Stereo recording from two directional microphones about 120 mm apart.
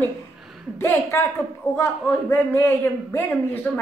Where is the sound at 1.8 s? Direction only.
20° left (ahead or behind).